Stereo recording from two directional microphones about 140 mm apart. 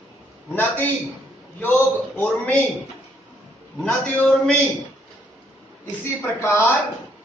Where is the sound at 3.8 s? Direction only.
10° left (ahead or behind).